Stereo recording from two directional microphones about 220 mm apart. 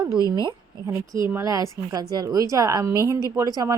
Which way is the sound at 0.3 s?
20° right (ahead or behind).